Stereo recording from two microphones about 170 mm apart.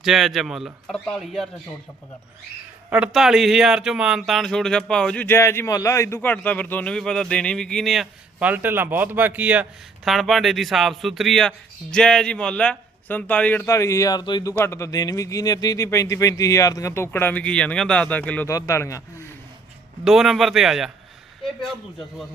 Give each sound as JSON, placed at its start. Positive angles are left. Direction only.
{"t": 0.0, "sound": "speech", "side_deg": 0}
{"t": 2.9, "sound": "speech", "side_deg": -5}
{"t": 14.5, "sound": "a man's voice", "side_deg": 15}
{"t": 20.1, "sound": "speech", "side_deg": 0}